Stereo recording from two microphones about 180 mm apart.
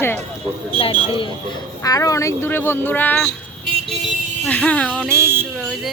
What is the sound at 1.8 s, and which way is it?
Speech, 20° left (ahead or behind).